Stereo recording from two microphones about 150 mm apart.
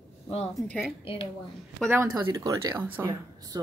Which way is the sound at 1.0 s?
35° left (ahead or behind).